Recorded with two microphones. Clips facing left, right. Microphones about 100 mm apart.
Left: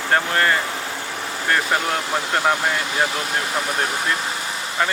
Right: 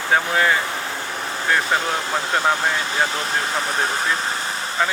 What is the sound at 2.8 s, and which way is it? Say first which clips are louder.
Speech: even; 30° right (ahead or behind).